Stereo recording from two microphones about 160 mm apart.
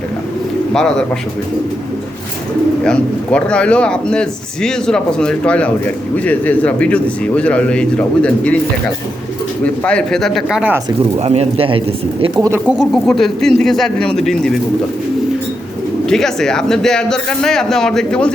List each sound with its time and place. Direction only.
0.7 s a man's voice: 5° left (ahead or behind)
2.8 s a man's voice: 5° left (ahead or behind)
9.6 s a man's voice: 5° left (ahead or behind)
11.2 s speech: 40° right (ahead or behind)
12.4 s a man's voice: 15° right (ahead or behind); by 14.6 s 5° left (ahead or behind)
16.0 s a man's voice: 5° left (ahead or behind)